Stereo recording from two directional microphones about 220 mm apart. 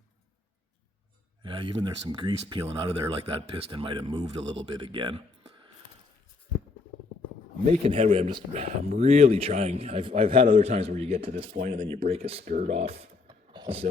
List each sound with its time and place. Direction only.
1.4 s speech: 20° right (ahead or behind)
7.8 s speech: 25° right (ahead or behind)
13.2 s a sound: 20° right (ahead or behind)